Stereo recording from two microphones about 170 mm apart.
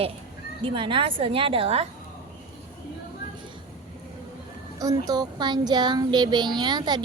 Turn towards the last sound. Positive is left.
turn(degrees=-25)  # may be behind; listen again after turning